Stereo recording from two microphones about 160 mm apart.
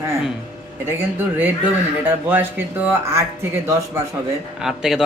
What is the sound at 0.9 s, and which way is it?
Speech, 15° right (ahead or behind).